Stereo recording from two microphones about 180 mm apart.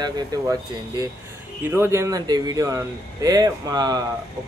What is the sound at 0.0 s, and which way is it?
Speech, 20° right (ahead or behind).